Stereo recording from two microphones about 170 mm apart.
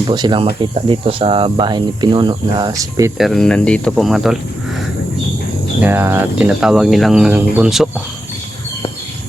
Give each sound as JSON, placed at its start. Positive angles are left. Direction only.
{"t": 0.1, "sound": "speech", "side_deg": -25}
{"t": 3.2, "sound": "speech", "side_deg": 0}
{"t": 5.8, "sound": "speech", "side_deg": -15}